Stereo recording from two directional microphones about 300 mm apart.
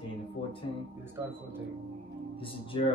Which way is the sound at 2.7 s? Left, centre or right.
Centre.